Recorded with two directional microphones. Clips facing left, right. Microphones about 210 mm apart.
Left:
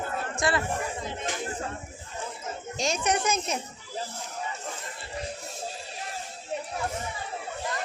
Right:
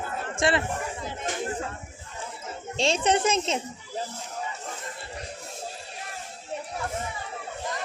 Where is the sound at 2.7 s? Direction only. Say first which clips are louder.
Right 4 dB; 30° right (ahead or behind).